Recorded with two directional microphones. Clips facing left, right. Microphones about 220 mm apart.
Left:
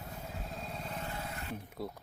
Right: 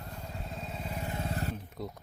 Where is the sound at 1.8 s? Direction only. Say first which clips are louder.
Left 2 dB; 5° left (ahead or behind).